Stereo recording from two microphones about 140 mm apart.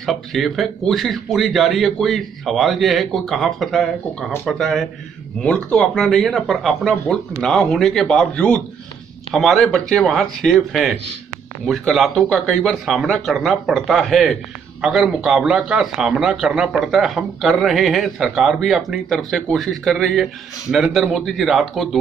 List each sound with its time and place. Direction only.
0.0 s speech: centre (ahead or behind)